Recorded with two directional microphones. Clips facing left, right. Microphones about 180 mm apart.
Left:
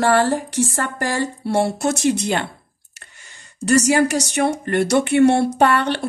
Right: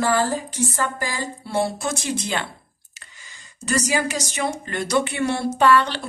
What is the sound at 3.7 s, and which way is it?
A woman's voice, 65° left (ahead or behind).